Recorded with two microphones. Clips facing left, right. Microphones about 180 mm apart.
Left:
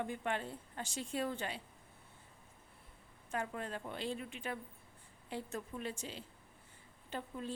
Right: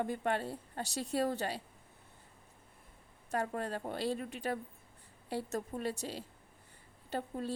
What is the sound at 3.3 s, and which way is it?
Speech, 40° right (ahead or behind).